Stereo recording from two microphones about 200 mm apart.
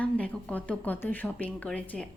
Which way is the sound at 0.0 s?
5° left (ahead or behind).